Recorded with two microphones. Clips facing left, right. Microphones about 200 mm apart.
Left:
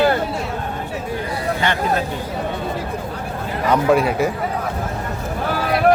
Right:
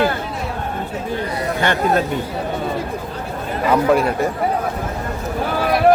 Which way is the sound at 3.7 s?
Centre (ahead or behind).